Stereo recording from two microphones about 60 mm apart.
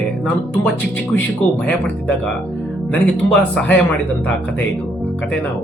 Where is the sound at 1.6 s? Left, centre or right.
Centre.